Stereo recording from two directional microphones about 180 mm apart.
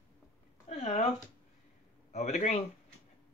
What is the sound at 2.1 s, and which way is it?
Speech, 40° left (ahead or behind).